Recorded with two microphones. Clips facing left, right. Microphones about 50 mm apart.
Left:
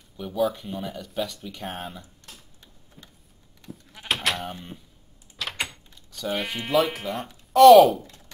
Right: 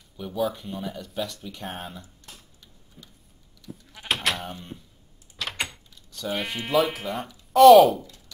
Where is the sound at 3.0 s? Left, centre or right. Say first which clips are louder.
Even; centre.